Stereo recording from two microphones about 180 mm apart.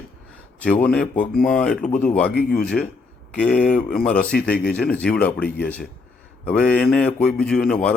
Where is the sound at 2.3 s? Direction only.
60° left (ahead or behind).